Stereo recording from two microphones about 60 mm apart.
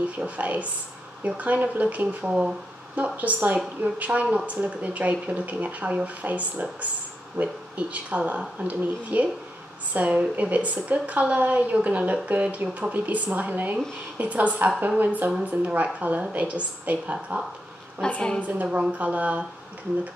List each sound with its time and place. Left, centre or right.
0.2 s a woman's voice: right
18.0 s a woman's voice: centre
18.4 s a woman's voice: right